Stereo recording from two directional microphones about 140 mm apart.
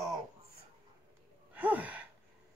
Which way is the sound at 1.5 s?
10° right (ahead or behind).